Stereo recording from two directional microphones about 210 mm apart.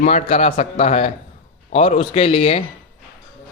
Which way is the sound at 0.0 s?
35° left (ahead or behind).